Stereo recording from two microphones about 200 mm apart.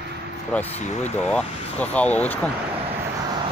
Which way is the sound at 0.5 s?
5° left (ahead or behind).